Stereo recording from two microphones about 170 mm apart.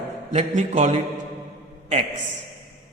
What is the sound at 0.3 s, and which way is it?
Speech, 45° right (ahead or behind).